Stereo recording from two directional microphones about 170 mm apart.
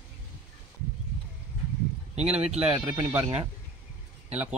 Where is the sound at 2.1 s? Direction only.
40° right (ahead or behind).